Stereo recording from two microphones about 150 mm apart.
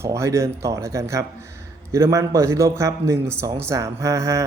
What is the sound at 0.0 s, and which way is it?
A man's voice, 20° right (ahead or behind).